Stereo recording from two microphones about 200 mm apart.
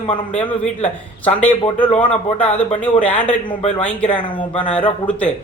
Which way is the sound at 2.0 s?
5° left (ahead or behind).